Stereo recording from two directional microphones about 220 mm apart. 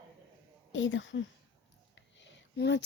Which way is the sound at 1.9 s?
55° left (ahead or behind).